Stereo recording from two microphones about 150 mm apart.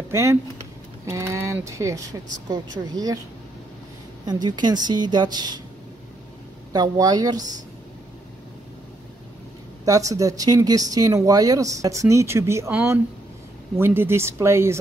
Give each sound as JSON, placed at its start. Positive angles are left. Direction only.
{"t": 0.1, "sound": "speech", "side_deg": -20}
{"t": 4.3, "sound": "speech", "side_deg": -30}
{"t": 6.7, "sound": "speech", "side_deg": -25}
{"t": 9.8, "sound": "speech", "side_deg": -20}
{"t": 13.7, "sound": "speech", "side_deg": -15}